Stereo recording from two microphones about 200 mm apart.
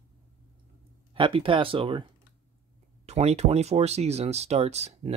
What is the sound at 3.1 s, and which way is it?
Speech, 30° right (ahead or behind).